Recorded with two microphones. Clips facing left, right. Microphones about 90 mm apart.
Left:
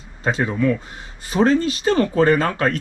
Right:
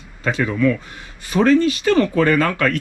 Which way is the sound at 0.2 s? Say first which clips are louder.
Right 2 dB; 30° left (ahead or behind).